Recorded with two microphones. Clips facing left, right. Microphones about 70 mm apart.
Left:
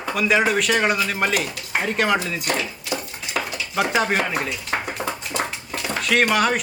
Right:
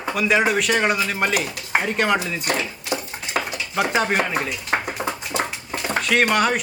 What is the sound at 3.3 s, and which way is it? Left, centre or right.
Dishes, right.